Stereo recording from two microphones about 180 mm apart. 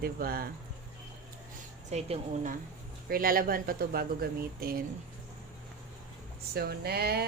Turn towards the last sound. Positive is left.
turn(degrees=-60)  # may be behind; listen again after turning